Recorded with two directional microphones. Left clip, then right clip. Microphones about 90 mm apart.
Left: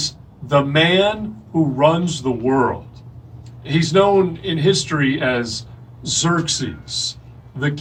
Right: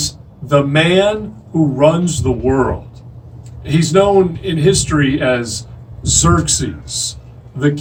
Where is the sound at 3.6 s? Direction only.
35° right (ahead or behind).